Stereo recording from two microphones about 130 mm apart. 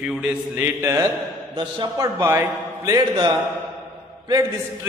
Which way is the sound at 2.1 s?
20° right (ahead or behind).